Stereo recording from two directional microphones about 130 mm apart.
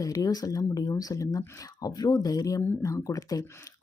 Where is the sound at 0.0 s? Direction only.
25° left (ahead or behind).